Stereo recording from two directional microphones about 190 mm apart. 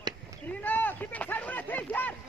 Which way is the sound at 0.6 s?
10° left (ahead or behind).